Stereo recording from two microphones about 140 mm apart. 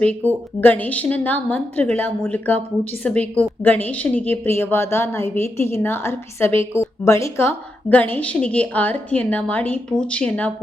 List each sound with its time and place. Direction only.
0.3 s a woman's voice: 15° left (ahead or behind)